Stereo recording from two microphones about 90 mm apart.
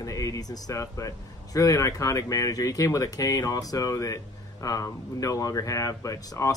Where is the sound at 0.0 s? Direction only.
40° left (ahead or behind).